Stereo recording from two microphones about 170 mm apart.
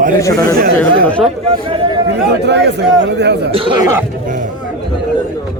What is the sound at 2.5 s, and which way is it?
Speech, 85° right.